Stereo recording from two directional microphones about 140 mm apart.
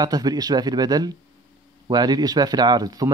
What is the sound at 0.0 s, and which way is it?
Speech, 30° right (ahead or behind).